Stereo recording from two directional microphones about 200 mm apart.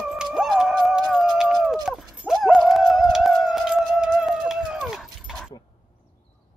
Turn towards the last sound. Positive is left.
turn(degrees=0)  # may be behind; listen again after turning